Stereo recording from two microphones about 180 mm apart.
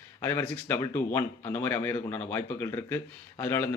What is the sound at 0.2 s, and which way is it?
A man's voice, 10° left (ahead or behind).